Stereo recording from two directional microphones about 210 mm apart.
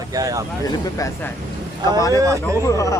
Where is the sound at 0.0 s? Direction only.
15° right (ahead or behind).